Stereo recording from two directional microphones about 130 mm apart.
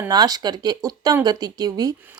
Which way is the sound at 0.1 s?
30° right (ahead or behind).